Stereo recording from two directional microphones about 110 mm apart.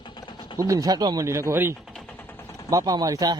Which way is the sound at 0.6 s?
30° right (ahead or behind).